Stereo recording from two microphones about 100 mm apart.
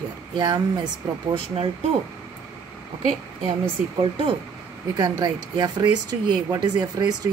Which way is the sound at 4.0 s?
65° right (ahead or behind).